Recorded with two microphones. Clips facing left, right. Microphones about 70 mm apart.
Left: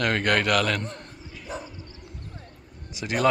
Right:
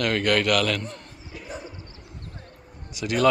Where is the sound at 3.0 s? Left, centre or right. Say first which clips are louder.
Right 2 dB; left.